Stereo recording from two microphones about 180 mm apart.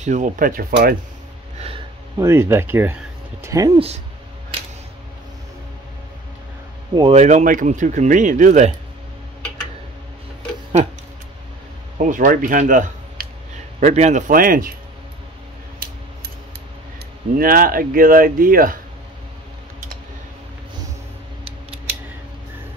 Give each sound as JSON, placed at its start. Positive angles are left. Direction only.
{"t": 0.0, "sound": "speech", "side_deg": -45}
{"t": 2.1, "sound": "speech", "side_deg": -15}
{"t": 7.0, "sound": "speech", "side_deg": -35}
{"t": 12.0, "sound": "speech", "side_deg": -45}
{"t": 17.4, "sound": "speech", "side_deg": -50}